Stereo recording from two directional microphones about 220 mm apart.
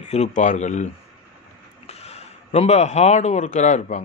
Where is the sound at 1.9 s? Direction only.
30° left (ahead or behind).